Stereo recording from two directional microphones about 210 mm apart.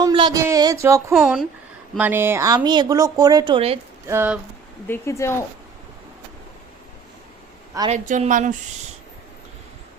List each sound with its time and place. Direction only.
0.0 s speech: 20° right (ahead or behind)
1.1 s speech: centre (ahead or behind); by 3.8 s 25° right (ahead or behind)
4.0 s speech: 10° right (ahead or behind)
4.9 s speech: 15° left (ahead or behind)
7.9 s a woman's voice: 35° right (ahead or behind)